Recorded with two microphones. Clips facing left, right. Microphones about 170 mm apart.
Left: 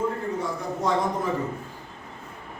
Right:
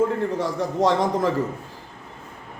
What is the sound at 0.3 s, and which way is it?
Speech, 90° right.